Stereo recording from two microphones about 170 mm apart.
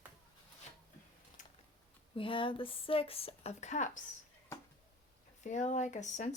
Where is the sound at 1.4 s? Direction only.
50° left (ahead or behind).